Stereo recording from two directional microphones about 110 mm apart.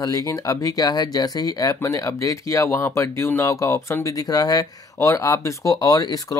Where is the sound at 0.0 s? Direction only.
30° left (ahead or behind).